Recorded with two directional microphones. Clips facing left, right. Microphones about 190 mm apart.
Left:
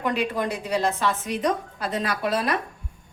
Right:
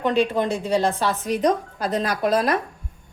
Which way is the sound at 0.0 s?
30° right (ahead or behind).